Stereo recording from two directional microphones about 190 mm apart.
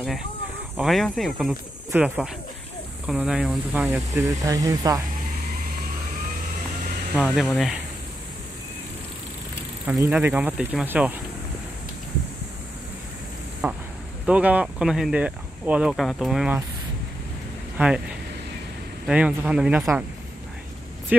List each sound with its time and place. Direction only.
0.7 s speech: centre (ahead or behind)
4.4 s speech: 20° right (ahead or behind)
7.2 s speech: 5° right (ahead or behind)
9.8 s speech: 10° right (ahead or behind)
13.6 s speech: 10° right (ahead or behind)
17.7 s speech: 5° right (ahead or behind)
21.1 s speech: 10° right (ahead or behind)